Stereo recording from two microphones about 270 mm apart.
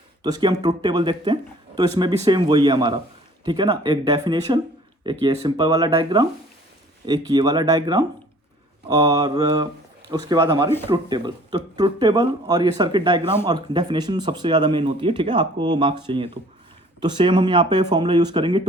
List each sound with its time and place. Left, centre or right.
0.2 s speech: centre